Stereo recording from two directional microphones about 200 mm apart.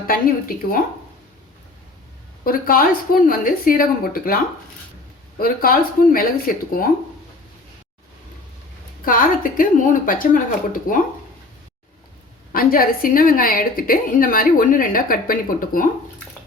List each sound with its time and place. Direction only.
0.1 s a woman's voice: 45° left (ahead or behind)
2.4 s a woman's voice: 45° left (ahead or behind)
5.4 s a woman's voice: 45° left (ahead or behind)
9.0 s a woman's voice: 45° left (ahead or behind)
12.5 s a woman's voice: 45° left (ahead or behind)